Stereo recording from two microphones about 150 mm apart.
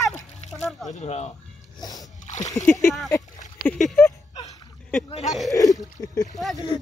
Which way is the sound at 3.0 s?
20° left (ahead or behind).